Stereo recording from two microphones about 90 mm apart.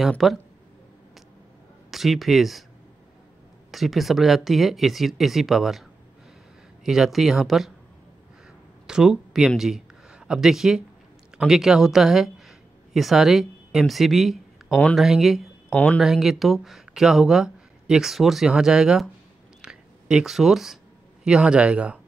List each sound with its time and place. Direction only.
0.2 s speech: centre (ahead or behind)
1.9 s speech: centre (ahead or behind)
3.7 s speech: centre (ahead or behind)
8.8 s speech: 5° right (ahead or behind)
15.7 s speech: 15° left (ahead or behind)
16.0 s speech: 5° right (ahead or behind)
19.6 s a sound: 10° right (ahead or behind)